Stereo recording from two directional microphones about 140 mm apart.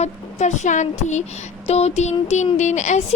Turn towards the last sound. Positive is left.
turn(degrees=55)  # may be behind; listen again after turning